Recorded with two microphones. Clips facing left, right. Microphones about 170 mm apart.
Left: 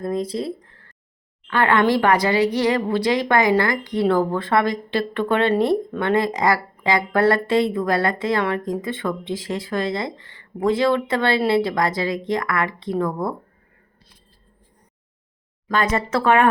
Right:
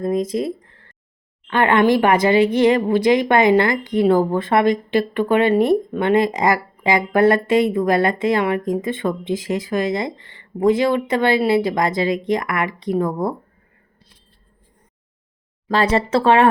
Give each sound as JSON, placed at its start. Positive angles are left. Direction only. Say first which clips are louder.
{"t": 0.0, "sound": "a sound", "louder": "right 4 dB", "side_deg": -20}
{"t": 1.5, "sound": "a woman's voice", "louder": "right 3 dB", "side_deg": -20}
{"t": 3.9, "sound": "a woman's voice", "louder": "right 4 dB", "side_deg": -10}
{"t": 15.7, "sound": "speech", "louder": "right 4 dB", "side_deg": -30}